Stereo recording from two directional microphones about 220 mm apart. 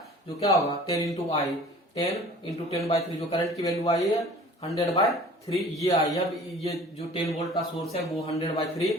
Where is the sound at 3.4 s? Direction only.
15° left (ahead or behind).